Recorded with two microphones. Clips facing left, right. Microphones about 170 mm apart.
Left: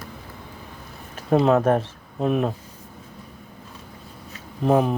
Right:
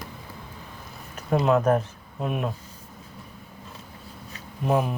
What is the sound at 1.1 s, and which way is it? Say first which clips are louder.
Speech: left 4 dB; 30° left (ahead or behind).